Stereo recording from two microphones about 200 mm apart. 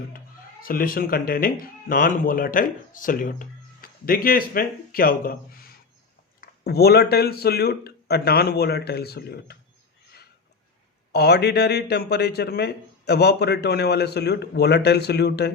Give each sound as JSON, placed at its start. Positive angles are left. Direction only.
{"t": 0.6, "sound": "speech", "side_deg": 45}
{"t": 11.1, "sound": "a man's voice", "side_deg": 55}